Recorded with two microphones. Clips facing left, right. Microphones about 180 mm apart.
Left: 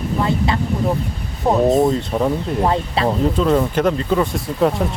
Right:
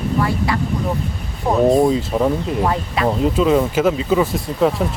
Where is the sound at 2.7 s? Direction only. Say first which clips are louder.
Left 1 dB; 25° left (ahead or behind).